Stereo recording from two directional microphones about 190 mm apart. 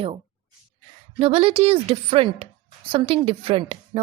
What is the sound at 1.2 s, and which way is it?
A woman's voice, 30° right (ahead or behind).